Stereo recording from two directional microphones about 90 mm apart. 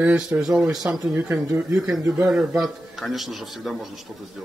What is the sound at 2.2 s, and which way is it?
Speech, 5° right (ahead or behind).